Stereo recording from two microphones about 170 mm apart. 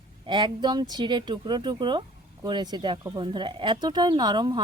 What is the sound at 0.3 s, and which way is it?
Speech, 25° right (ahead or behind).